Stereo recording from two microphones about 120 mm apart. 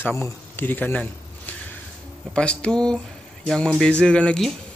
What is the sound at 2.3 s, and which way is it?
A man's voice, 10° left (ahead or behind).